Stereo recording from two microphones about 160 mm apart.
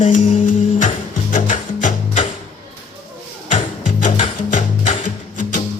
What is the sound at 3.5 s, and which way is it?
Music, 50° left (ahead or behind).